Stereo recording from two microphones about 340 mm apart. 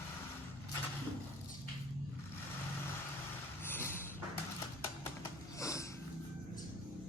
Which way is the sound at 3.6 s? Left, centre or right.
Centre.